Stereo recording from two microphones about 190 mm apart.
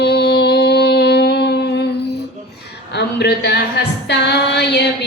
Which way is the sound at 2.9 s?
60° left (ahead or behind).